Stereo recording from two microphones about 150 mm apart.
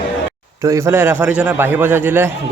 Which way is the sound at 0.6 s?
20° right (ahead or behind).